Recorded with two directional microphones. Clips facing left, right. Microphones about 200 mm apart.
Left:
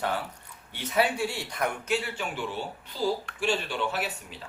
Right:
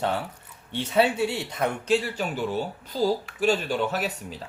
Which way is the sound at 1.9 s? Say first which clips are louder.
Right 6 dB; 40° right (ahead or behind).